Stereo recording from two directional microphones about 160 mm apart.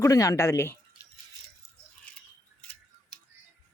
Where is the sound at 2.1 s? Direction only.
10° left (ahead or behind).